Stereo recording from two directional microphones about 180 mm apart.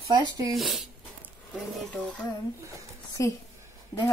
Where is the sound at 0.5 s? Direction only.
Centre (ahead or behind).